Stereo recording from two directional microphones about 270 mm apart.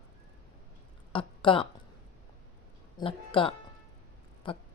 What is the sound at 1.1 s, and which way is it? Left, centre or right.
Speech, centre.